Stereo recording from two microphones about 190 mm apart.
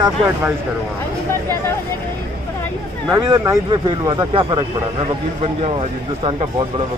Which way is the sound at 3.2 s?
20° right (ahead or behind).